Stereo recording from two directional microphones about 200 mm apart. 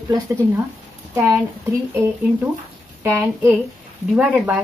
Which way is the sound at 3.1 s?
10° right (ahead or behind).